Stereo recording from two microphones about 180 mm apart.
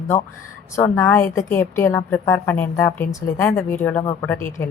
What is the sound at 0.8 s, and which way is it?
A woman's voice, 15° left (ahead or behind).